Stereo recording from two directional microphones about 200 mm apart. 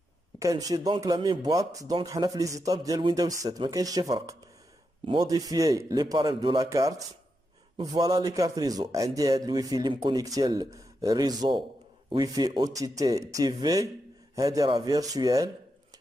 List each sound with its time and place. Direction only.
0.4 s a man's voice: 15° right (ahead or behind)